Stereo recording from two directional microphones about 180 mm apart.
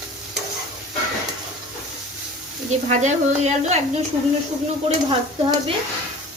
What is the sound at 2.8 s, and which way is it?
Speech, 40° right (ahead or behind).